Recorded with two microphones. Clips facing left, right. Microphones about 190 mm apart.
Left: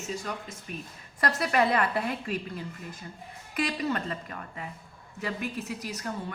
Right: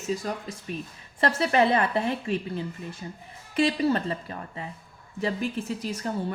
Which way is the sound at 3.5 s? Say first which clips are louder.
Right 6 dB; 30° right (ahead or behind).